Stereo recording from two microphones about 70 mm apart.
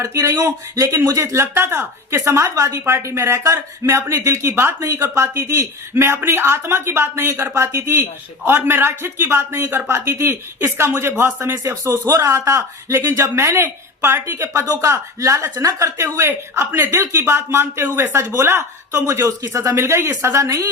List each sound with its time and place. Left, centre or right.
0.0 s speech: right
13.1 s speech: right
14.8 s speech: right
15.5 s speech: right
16.1 s speech: right
19.4 s speech: right